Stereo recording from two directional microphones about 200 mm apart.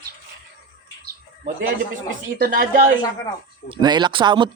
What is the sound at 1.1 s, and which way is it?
Bird, 45° right (ahead or behind).